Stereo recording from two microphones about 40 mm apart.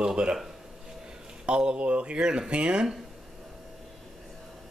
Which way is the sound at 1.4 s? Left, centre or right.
Right.